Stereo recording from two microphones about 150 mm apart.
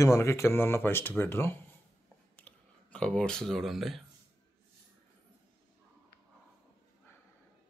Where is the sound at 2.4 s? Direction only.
10° left (ahead or behind).